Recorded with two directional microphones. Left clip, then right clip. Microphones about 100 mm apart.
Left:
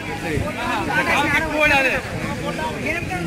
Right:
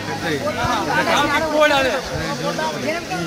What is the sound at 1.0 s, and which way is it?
Speech, 40° right (ahead or behind).